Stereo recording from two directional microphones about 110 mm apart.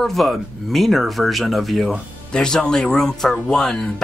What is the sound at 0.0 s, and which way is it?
Speech, centre (ahead or behind).